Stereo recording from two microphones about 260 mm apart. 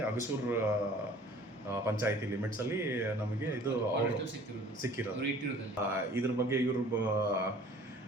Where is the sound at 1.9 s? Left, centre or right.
Centre.